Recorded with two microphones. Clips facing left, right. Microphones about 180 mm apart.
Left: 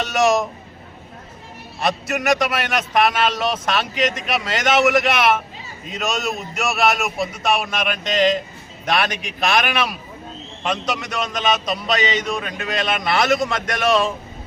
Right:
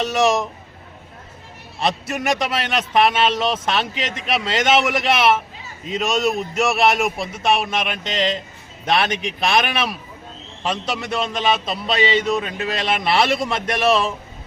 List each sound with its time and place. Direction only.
0.0 s a man's voice: 30° right (ahead or behind)
1.8 s a man's voice: 30° right (ahead or behind)
7.3 s a man's voice: 25° right (ahead or behind)